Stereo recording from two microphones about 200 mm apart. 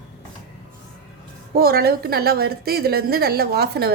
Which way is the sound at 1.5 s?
50° right (ahead or behind).